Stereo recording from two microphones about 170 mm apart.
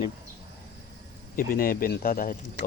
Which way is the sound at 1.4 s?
60° left (ahead or behind).